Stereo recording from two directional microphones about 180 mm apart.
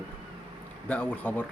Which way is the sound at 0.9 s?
5° left (ahead or behind).